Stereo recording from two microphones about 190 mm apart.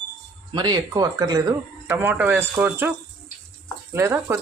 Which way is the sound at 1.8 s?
10° right (ahead or behind).